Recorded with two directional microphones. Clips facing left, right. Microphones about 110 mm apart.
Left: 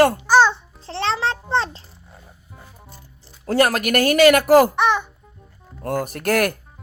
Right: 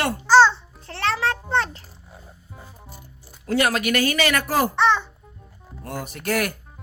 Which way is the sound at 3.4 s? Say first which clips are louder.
Left 3 dB; 40° left (ahead or behind).